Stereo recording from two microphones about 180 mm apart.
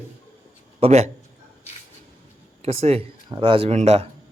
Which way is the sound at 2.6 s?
35° right (ahead or behind).